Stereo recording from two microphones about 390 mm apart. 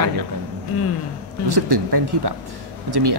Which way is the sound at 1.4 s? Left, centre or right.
Right.